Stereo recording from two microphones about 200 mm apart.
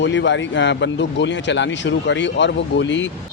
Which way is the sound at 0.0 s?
65° left (ahead or behind).